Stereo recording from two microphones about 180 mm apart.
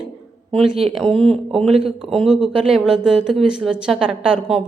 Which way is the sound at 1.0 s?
35° right (ahead or behind).